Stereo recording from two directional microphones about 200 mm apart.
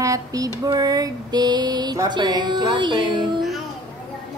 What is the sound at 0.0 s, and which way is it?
Female singing, 15° right (ahead or behind).